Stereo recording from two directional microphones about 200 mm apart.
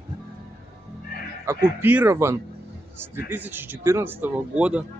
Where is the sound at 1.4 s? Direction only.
10° right (ahead or behind).